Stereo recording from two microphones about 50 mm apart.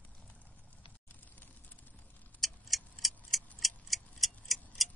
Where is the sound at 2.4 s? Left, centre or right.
Centre.